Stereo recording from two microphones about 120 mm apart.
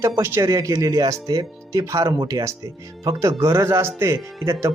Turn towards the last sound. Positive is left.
turn(degrees=-20)  # may be behind; listen again after turning